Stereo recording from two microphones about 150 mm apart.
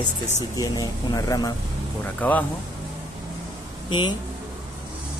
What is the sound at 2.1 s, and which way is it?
Speech, 10° left (ahead or behind).